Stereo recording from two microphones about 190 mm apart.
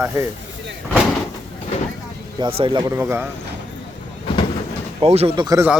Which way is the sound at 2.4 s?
25° right (ahead or behind).